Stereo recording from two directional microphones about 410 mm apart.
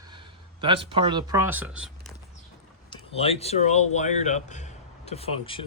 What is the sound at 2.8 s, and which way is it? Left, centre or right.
A man's voice, centre.